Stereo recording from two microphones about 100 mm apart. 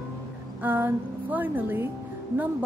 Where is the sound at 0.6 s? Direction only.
20° right (ahead or behind).